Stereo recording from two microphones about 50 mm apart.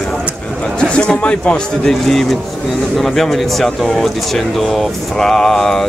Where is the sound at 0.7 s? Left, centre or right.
Centre.